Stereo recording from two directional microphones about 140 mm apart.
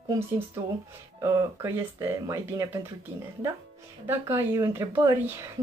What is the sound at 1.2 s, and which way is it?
Speech, 25° right (ahead or behind).